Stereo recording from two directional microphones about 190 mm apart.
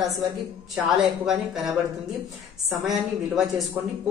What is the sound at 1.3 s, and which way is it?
Speech, 5° right (ahead or behind).